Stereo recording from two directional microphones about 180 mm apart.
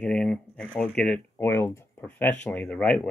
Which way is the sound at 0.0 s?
5° left (ahead or behind).